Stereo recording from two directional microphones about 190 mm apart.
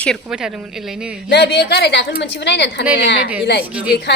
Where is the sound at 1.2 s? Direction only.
60° left (ahead or behind).